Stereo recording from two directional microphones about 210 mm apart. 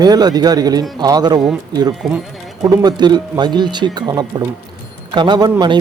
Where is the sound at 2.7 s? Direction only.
20° right (ahead or behind).